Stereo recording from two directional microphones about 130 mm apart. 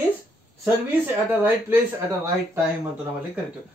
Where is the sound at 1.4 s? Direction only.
15° right (ahead or behind).